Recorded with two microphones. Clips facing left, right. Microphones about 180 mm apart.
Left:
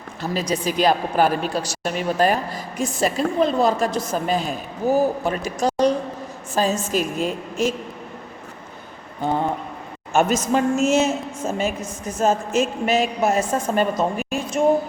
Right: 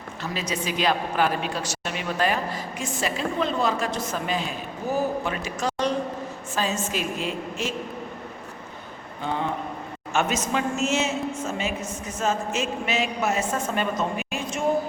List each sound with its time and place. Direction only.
0.2 s speech: 40° left (ahead or behind)
9.2 s a man's voice: 40° left (ahead or behind)
12.5 s speech: 40° left (ahead or behind)